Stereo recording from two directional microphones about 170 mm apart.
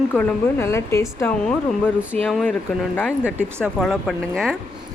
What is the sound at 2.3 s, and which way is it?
Speech, centre (ahead or behind).